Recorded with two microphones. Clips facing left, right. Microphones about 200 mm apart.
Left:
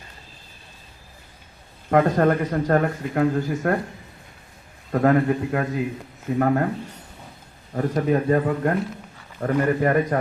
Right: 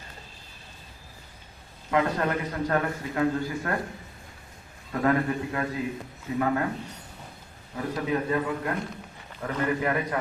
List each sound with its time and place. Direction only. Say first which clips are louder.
1.9 s a man's voice: left 7 dB; 50° left (ahead or behind)
4.9 s a man's voice: left 6 dB; 50° left (ahead or behind)
7.8 s a man's voice: left 7 dB; 45° left (ahead or behind)